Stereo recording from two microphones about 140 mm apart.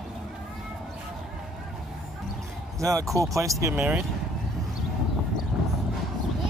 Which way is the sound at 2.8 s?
25° right (ahead or behind).